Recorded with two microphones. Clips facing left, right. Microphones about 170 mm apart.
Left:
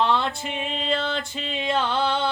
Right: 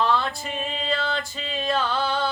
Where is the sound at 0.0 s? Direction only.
25° left (ahead or behind).